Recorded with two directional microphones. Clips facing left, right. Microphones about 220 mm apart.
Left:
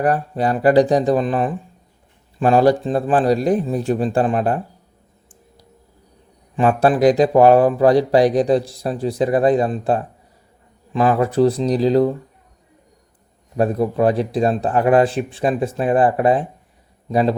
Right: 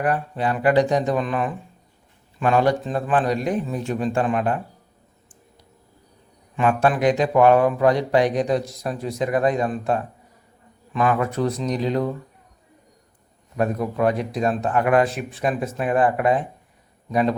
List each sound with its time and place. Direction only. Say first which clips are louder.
0.0 s speech: left 4 dB; 40° left (ahead or behind)
6.6 s speech: left 5 dB; 35° left (ahead or behind)
13.6 s speech: left 5 dB; 30° left (ahead or behind)